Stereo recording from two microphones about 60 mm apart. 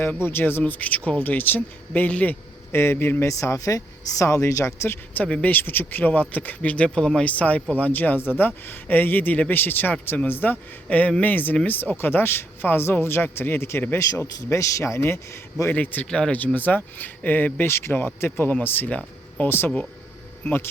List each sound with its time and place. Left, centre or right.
0.2 s speech: left
0.6 s speech: left
2.7 s speech: left
3.3 s speech: left
5.1 s speech: left
10.8 s speech: left
14.3 s speech: left
15.7 s speech: left
16.0 s speech: centre
16.6 s speech: left